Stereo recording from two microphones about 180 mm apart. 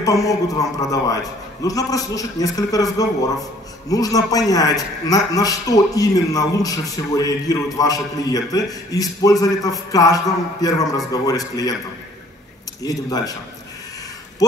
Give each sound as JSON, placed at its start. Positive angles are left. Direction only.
{"t": 0.0, "sound": "a man's voice", "side_deg": 20}
{"t": 12.8, "sound": "a man's voice", "side_deg": 20}